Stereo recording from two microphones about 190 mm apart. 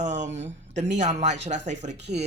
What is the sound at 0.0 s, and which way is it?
Speech, 40° right (ahead or behind).